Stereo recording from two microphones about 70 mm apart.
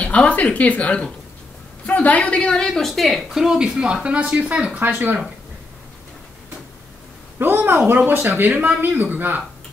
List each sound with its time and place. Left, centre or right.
0.0 s speech: centre
4.7 s speech: right
7.3 s speech: right